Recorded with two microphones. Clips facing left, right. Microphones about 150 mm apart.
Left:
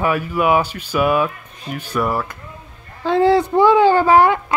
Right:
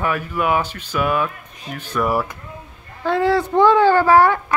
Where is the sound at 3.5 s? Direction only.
10° left (ahead or behind).